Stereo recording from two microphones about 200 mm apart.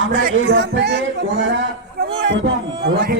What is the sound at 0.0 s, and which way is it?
A man's voice, 65° right (ahead or behind).